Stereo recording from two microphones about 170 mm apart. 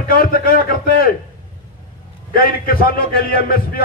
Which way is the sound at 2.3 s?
60° left (ahead or behind).